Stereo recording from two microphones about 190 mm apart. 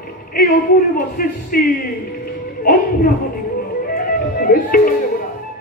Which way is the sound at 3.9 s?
50° left (ahead or behind).